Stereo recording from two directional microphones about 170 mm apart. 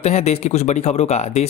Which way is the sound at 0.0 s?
40° left (ahead or behind).